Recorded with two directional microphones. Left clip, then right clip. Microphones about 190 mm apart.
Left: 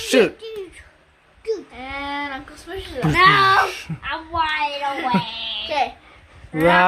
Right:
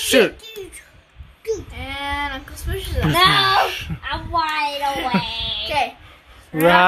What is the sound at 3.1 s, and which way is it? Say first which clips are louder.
Speech: left 1 dB; 40° right (ahead or behind).